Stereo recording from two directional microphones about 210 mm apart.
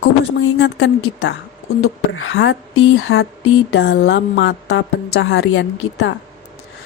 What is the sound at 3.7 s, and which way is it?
Speech, 55° left (ahead or behind).